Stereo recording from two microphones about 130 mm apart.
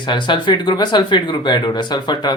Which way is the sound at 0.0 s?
35° left (ahead or behind).